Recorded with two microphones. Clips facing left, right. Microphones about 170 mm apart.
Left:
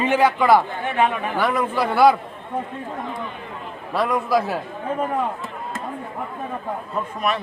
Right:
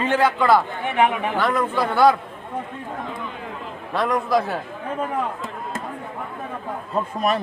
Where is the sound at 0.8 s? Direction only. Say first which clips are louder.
Right 1 dB; 15° right (ahead or behind).